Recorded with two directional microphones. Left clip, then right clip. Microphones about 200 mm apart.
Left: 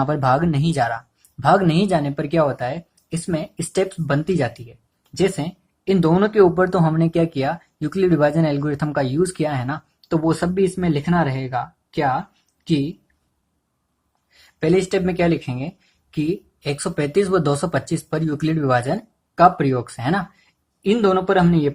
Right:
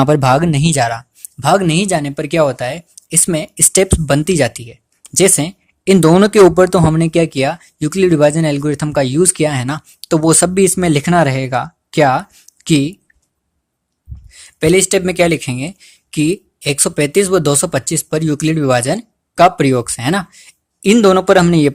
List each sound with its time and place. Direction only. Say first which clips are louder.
0.0 s speech: right 7 dB; 40° right (ahead or behind)
14.3 s speech: right 7 dB; 40° right (ahead or behind)